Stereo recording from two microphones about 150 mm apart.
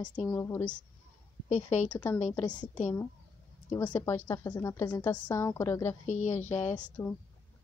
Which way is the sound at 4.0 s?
20° left (ahead or behind).